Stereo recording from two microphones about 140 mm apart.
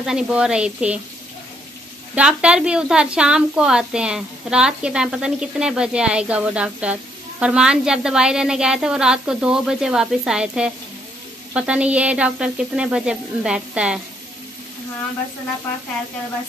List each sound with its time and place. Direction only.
0.0 s speech: 5° right (ahead or behind)
2.1 s a woman's voice: 5° right (ahead or behind)